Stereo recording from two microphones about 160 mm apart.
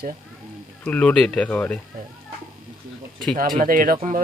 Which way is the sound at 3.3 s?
60° right (ahead or behind).